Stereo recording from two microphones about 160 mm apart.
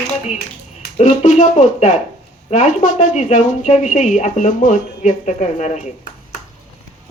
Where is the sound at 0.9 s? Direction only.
50° left (ahead or behind).